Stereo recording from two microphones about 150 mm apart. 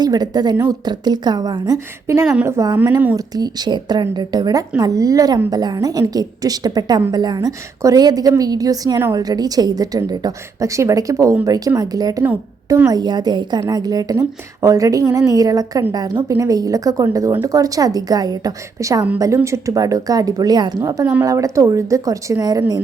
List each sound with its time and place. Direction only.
0.0 s a woman's voice: 25° right (ahead or behind)
0.5 s a woman's voice: 15° right (ahead or behind)
0.9 s a woman's voice: 30° right (ahead or behind)
2.2 s a woman's voice: 5° right (ahead or behind)
2.5 s a woman's voice: 20° right (ahead or behind)
3.2 s a woman's voice: 25° right (ahead or behind)